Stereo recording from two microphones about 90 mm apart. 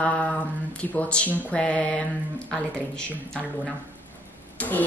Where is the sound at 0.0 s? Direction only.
15° left (ahead or behind).